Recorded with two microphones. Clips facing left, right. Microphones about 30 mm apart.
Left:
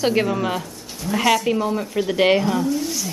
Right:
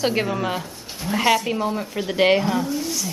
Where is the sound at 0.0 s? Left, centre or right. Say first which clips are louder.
Left 2 dB; centre.